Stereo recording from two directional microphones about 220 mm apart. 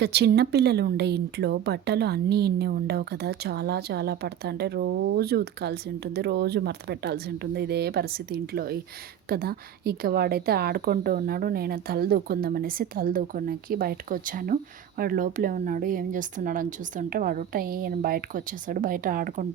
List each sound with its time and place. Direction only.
0.0 s a woman's voice: 50° right (ahead or behind)